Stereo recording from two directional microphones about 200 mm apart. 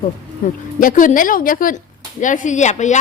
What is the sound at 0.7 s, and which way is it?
A woman's voice, 40° left (ahead or behind).